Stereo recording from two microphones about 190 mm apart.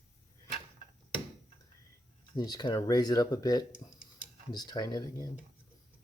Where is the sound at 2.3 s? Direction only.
20° left (ahead or behind).